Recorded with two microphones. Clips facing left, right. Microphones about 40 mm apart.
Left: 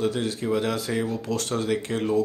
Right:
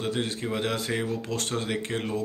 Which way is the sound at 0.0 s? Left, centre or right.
Right.